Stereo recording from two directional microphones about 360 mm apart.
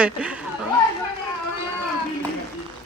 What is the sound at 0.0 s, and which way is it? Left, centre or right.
Speech, centre.